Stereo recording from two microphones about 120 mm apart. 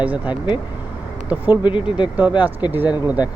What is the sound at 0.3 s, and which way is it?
Speech, 40° left (ahead or behind).